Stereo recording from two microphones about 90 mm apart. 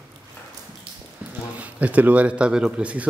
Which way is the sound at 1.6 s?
15° right (ahead or behind).